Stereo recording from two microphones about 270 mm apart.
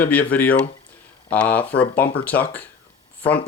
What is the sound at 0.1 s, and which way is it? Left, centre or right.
Speech, centre.